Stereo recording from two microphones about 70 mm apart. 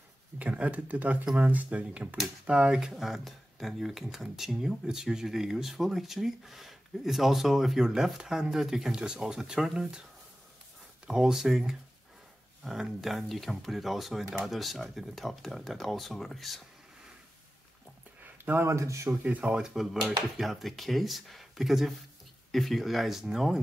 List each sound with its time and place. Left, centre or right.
0.4 s speech: centre
11.1 s speech: centre
13.0 s speech: centre
18.2 s speech: right
19.2 s speech: centre